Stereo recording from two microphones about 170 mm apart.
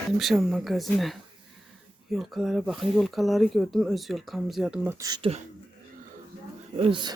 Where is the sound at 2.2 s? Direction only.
Centre (ahead or behind).